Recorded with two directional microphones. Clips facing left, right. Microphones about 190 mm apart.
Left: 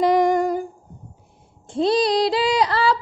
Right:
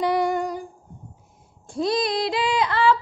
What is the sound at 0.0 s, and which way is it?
Humming, 45° left (ahead or behind).